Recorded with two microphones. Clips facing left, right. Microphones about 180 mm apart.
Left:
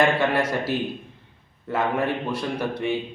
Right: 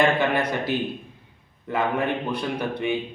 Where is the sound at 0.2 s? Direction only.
Centre (ahead or behind).